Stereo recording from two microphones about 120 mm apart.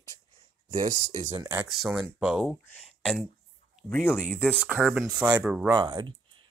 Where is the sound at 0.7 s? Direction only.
90° right.